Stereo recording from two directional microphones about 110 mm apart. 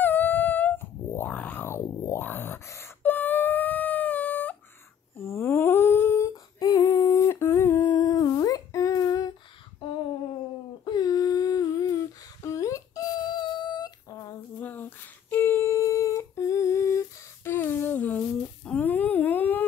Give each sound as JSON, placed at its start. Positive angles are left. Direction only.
{"t": 0.0, "sound": "a sound", "side_deg": 15}
{"t": 5.1, "sound": "humming", "side_deg": 25}
{"t": 8.0, "sound": "humming", "side_deg": 35}
{"t": 10.9, "sound": "humming", "side_deg": 35}
{"t": 14.6, "sound": "humming", "side_deg": 15}
{"t": 17.5, "sound": "a sound", "side_deg": 20}